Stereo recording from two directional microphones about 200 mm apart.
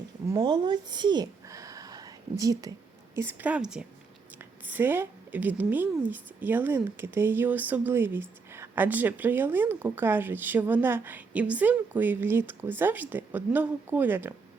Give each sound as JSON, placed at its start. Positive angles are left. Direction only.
{"t": 0.3, "sound": "a woman's voice", "side_deg": -20}